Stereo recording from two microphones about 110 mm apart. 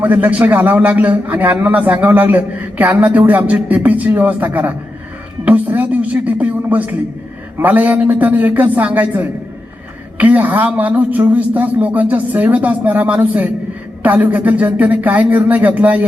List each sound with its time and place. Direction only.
0.0 s a man's voice: 15° right (ahead or behind)
5.5 s music: 15° right (ahead or behind)
7.6 s a man's voice: 15° right (ahead or behind)